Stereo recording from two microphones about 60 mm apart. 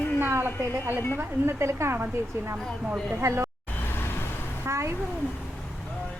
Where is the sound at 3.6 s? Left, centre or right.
Left.